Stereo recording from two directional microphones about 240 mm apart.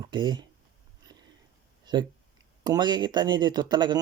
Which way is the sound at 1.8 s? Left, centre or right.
Centre.